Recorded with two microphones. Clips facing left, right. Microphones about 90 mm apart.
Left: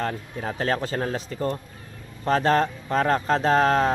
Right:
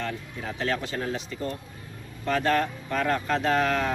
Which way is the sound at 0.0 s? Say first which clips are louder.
Left 4 dB; 40° left (ahead or behind).